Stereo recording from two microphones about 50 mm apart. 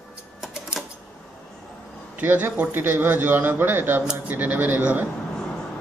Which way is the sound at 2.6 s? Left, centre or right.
Right.